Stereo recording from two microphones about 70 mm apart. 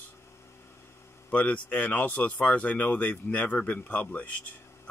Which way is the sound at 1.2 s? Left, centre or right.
Left.